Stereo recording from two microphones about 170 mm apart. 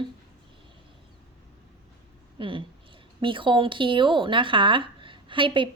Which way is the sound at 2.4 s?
30° right (ahead or behind).